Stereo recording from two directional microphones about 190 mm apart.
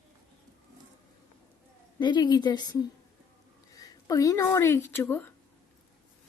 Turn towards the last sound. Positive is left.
turn(degrees=10)  # may be behind; listen again after turning